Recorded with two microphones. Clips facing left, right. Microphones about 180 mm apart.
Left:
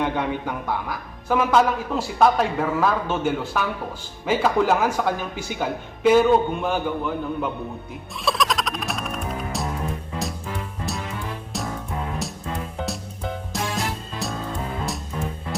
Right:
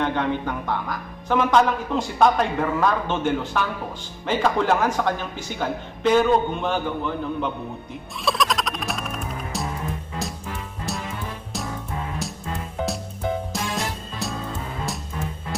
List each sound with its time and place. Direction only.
0.0 s speech: 10° left (ahead or behind)
8.2 s music: centre (ahead or behind)
13.5 s music: centre (ahead or behind)